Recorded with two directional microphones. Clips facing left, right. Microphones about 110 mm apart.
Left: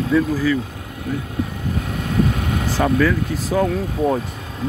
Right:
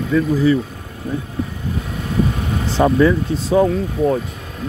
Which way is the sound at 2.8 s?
25° right (ahead or behind).